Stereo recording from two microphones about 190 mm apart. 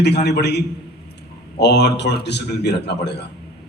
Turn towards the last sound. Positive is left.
turn(degrees=60)  # may be behind; listen again after turning